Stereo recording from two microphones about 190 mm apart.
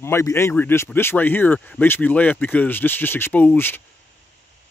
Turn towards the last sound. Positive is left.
turn(degrees=10)  # may be behind; listen again after turning